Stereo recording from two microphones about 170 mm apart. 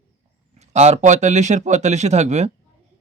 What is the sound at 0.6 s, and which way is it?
Speech, 40° right (ahead or behind).